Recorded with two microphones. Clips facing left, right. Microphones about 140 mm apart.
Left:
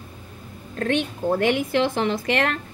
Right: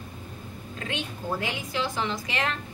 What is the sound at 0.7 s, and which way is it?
A woman's voice, 55° left (ahead or behind).